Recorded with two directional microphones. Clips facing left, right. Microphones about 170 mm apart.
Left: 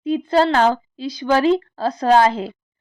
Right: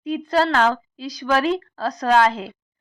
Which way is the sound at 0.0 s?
25° left (ahead or behind).